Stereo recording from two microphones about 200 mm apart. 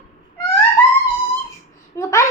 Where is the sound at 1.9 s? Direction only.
15° left (ahead or behind).